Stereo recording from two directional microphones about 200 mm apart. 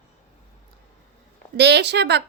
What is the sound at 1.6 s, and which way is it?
Speech, 60° right (ahead or behind).